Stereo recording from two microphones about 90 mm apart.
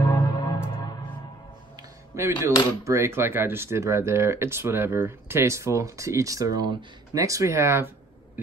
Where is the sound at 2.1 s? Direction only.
35° right (ahead or behind).